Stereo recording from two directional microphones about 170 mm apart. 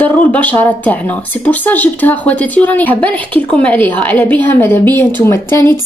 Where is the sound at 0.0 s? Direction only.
10° left (ahead or behind).